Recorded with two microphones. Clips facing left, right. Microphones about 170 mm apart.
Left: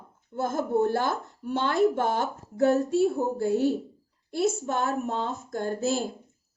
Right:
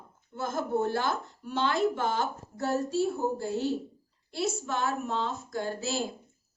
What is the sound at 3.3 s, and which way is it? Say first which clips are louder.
Speech: left 7 dB; 60° left (ahead or behind).